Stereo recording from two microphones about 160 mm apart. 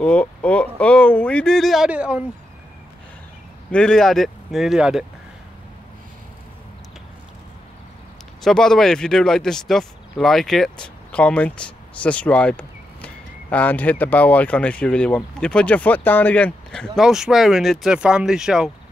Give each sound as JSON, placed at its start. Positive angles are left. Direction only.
{"t": 0.0, "sound": "speech", "side_deg": 10}
{"t": 3.7, "sound": "speech", "side_deg": 5}
{"t": 8.4, "sound": "speech", "side_deg": 5}